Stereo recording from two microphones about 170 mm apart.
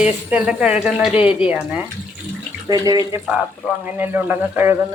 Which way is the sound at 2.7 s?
20° right (ahead or behind).